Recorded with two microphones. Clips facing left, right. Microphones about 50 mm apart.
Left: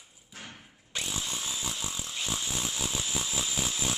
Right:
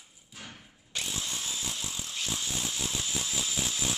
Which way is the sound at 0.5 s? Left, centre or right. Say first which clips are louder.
Left 1 dB; centre.